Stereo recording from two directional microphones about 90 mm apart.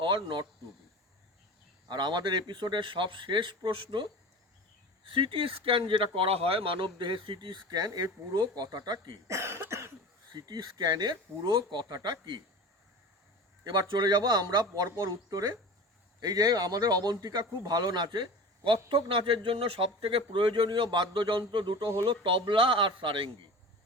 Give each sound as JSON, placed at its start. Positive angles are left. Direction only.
{"t": 0.0, "sound": "speech", "side_deg": -55}
{"t": 1.9, "sound": "speech", "side_deg": -55}
{"t": 5.0, "sound": "speech", "side_deg": -75}
{"t": 9.2, "sound": "cough", "side_deg": -30}
{"t": 10.3, "sound": "a man's voice", "side_deg": -50}
{"t": 13.7, "sound": "a man's voice", "side_deg": -50}
{"t": 14.8, "sound": "a man's voice", "side_deg": -30}